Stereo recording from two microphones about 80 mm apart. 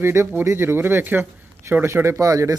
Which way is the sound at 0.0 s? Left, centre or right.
Right.